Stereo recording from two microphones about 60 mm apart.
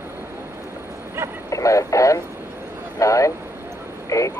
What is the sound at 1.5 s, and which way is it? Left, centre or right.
Radio, left.